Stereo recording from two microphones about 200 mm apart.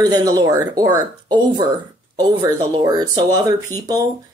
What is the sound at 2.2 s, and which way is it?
Speech, 20° right (ahead or behind).